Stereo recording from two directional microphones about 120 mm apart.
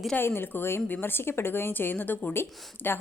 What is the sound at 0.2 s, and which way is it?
A woman's voice, 20° left (ahead or behind).